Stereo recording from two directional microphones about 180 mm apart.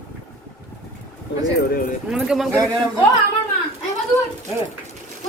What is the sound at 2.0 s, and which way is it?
Speech, 5° right (ahead or behind).